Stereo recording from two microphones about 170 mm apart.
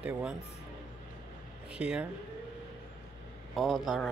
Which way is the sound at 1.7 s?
5° right (ahead or behind).